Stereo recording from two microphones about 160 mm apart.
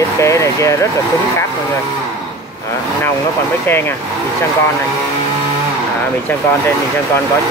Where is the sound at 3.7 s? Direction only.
15° left (ahead or behind).